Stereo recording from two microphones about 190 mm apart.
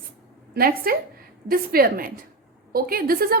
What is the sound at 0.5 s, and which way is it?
A woman's voice, 50° right (ahead or behind).